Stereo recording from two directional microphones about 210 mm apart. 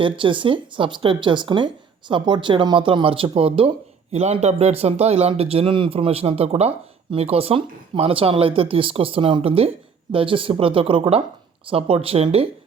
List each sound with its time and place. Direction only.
0.0 s a man's voice: 25° right (ahead or behind)